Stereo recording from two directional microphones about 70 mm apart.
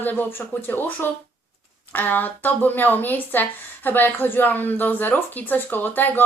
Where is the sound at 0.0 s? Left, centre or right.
Left.